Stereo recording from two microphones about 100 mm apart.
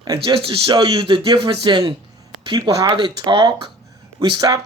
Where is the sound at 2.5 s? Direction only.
40° right (ahead or behind).